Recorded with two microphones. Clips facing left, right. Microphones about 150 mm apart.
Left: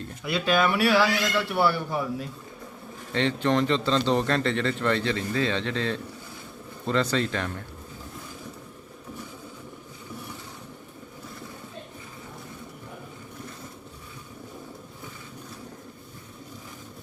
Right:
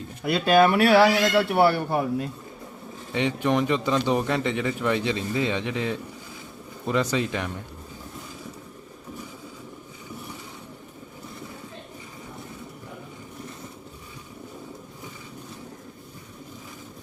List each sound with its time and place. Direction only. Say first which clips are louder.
0.2 s speech: right 5 dB; 50° right (ahead or behind)
3.1 s a man's voice: even; 15° right (ahead or behind)